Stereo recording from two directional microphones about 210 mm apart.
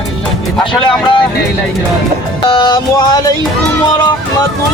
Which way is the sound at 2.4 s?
20° left (ahead or behind).